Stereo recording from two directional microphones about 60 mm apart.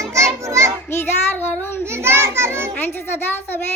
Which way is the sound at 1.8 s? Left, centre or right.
Right.